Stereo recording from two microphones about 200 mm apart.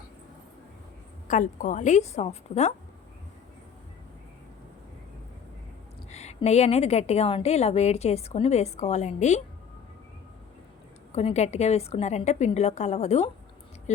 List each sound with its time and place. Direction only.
1.3 s a woman's voice: 40° left (ahead or behind)
6.1 s a woman's voice: 35° left (ahead or behind)
11.1 s a woman's voice: 30° left (ahead or behind)